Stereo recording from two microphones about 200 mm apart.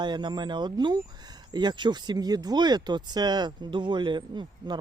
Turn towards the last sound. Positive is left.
turn(degrees=-25)  # may be behind; listen again after turning